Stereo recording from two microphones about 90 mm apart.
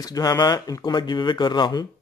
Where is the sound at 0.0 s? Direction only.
45° left (ahead or behind).